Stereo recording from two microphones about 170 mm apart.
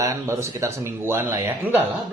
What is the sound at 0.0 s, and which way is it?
Speech, 15° right (ahead or behind).